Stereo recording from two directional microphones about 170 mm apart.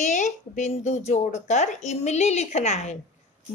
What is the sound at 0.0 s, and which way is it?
Speech, 45° left (ahead or behind).